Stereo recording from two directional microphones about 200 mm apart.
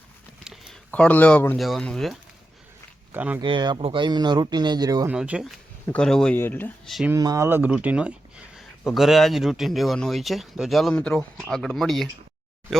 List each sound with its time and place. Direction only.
0.4 s a sound: centre (ahead or behind)
1.6 s speech: centre (ahead or behind)
3.4 s speech: 25° right (ahead or behind)
5.1 s speech: 5° right (ahead or behind)
7.1 s speech: 15° right (ahead or behind); by 12.0 s centre (ahead or behind)